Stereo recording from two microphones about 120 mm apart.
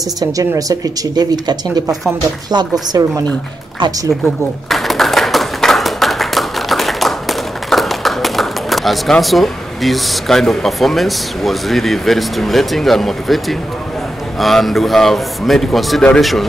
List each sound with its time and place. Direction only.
0.2 s speech: 30° right (ahead or behind)
4.6 s tap: centre (ahead or behind)
14.4 s speech: centre (ahead or behind)